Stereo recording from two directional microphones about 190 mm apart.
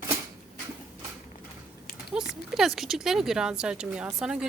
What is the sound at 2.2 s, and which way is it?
Speech, 5° right (ahead or behind).